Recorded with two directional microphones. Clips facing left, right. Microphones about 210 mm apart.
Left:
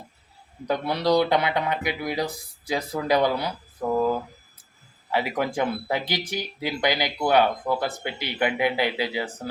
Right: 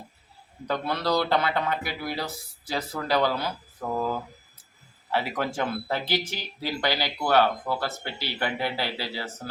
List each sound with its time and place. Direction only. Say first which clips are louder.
0.7 s speech: left 4 dB; 15° left (ahead or behind)
5.1 s speech: left 3 dB; 15° left (ahead or behind)